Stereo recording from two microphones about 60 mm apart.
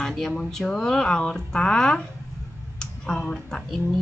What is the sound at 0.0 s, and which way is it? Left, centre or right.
Speech, centre.